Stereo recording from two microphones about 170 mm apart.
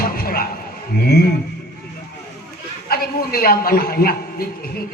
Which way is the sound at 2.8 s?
65° left (ahead or behind).